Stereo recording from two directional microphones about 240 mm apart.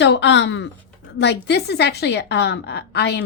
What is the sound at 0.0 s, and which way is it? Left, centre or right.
A woman's voice, left.